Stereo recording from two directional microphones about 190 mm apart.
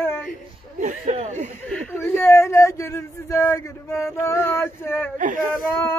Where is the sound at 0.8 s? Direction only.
40° right (ahead or behind).